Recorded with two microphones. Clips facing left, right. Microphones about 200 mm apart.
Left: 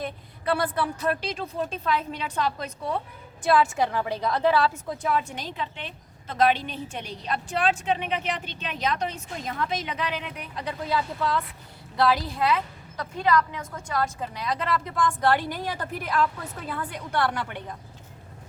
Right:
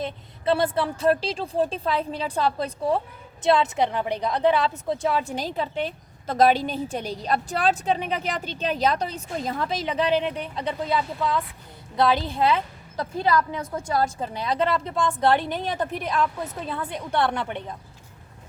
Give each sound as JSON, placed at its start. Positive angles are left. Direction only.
{"t": 0.0, "sound": "a woman's voice", "side_deg": -25}
{"t": 4.9, "sound": "a woman's voice", "side_deg": -30}